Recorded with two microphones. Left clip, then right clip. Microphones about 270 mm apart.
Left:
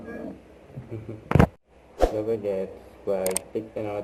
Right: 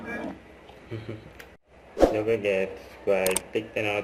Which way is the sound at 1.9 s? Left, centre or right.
Centre.